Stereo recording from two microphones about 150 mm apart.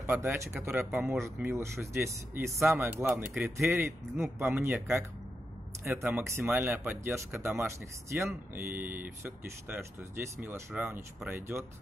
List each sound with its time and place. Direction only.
0.0 s speech: 15° right (ahead or behind)
6.0 s speech: 15° right (ahead or behind)